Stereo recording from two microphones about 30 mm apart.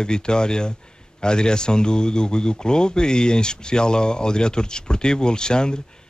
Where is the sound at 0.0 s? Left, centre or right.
Left.